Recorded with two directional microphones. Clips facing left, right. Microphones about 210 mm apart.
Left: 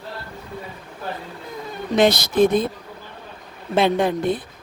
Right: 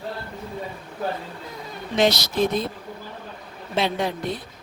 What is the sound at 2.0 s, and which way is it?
Speech, 55° left (ahead or behind).